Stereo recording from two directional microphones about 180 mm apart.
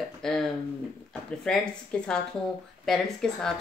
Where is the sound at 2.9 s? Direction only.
Centre (ahead or behind).